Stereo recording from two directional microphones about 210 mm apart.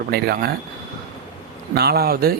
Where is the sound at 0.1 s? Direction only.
50° right (ahead or behind).